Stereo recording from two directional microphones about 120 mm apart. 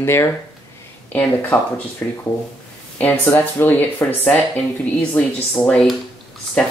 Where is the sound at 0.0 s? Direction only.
20° left (ahead or behind).